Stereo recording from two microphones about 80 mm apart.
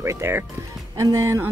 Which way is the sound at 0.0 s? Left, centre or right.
Right.